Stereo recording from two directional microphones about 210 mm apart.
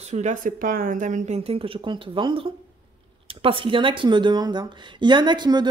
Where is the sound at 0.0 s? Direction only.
35° right (ahead or behind).